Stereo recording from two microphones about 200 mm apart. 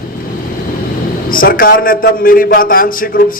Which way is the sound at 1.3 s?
45° left (ahead or behind).